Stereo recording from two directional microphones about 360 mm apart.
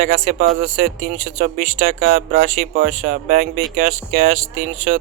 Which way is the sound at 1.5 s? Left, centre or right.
Right.